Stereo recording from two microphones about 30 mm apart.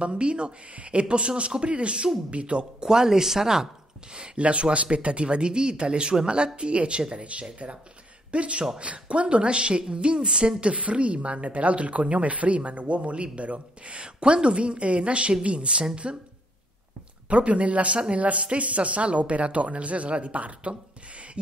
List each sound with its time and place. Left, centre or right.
0.0 s a man's voice: right
2.8 s speech: centre
4.4 s a man's voice: right
10.6 s speech: right
14.0 s a man's voice: right
17.3 s speech: right